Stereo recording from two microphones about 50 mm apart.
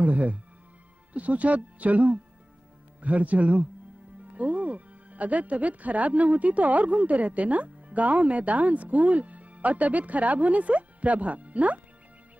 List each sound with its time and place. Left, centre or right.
0.0 s speech: right